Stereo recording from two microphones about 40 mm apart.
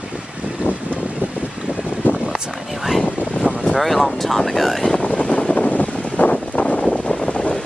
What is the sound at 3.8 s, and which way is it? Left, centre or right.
Speech, centre.